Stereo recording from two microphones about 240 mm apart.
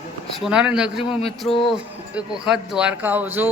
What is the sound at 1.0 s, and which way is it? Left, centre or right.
Mantra, left.